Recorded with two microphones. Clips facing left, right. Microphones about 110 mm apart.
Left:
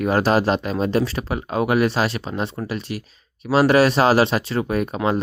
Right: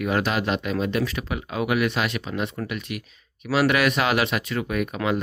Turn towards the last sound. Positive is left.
turn(degrees=35)  # may be behind; listen again after turning